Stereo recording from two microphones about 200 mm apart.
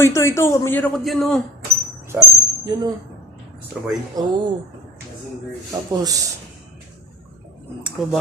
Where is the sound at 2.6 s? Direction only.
20° right (ahead or behind).